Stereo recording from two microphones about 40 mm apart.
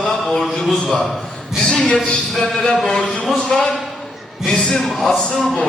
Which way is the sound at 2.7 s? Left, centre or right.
Centre.